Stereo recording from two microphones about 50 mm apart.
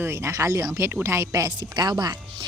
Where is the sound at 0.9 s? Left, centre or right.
Right.